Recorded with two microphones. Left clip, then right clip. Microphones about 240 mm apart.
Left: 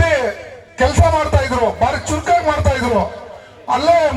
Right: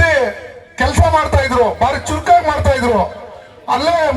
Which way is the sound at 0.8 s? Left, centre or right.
Right.